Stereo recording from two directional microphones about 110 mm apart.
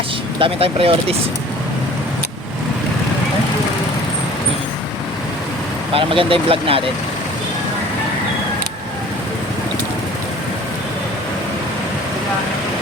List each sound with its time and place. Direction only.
0.3 s speech: 55° right (ahead or behind)
5.9 s speech: 55° right (ahead or behind)